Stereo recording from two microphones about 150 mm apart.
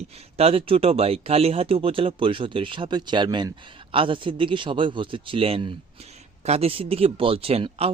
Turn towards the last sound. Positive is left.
turn(degrees=-40)  # may be behind; listen again after turning